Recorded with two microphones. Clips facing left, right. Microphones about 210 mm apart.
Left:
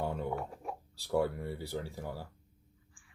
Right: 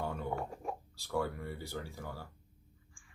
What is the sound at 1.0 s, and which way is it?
Speech, 35° left (ahead or behind).